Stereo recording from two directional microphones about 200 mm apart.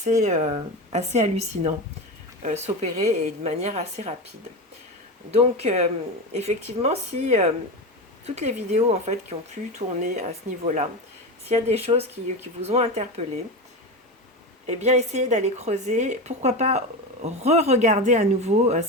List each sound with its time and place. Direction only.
0.0 s speech: 35° right (ahead or behind)
5.3 s speech: 30° right (ahead or behind)
14.7 s speech: 35° right (ahead or behind)